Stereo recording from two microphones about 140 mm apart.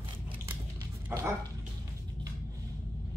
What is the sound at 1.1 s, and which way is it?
Dog, 20° right (ahead or behind).